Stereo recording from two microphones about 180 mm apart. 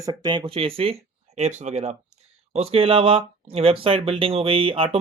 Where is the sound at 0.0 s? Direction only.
25° right (ahead or behind).